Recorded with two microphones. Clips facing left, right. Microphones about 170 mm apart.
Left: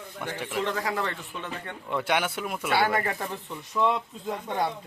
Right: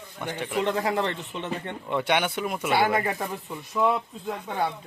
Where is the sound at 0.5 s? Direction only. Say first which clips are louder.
Right 4 dB; 25° right (ahead or behind).